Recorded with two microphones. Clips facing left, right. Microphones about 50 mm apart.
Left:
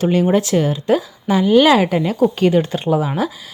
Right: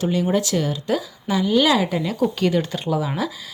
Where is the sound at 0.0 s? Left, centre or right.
Left.